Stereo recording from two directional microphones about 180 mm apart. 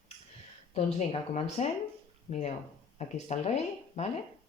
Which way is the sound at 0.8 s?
35° left (ahead or behind).